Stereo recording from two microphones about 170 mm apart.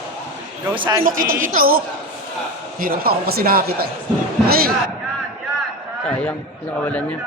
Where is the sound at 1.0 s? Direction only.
55° right (ahead or behind).